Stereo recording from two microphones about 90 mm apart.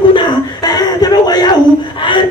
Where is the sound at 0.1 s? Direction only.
55° left (ahead or behind).